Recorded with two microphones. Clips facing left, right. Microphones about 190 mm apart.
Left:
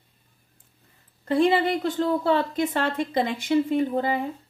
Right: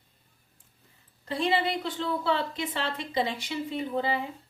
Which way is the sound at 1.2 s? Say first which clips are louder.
Left 7 dB; 50° left (ahead or behind).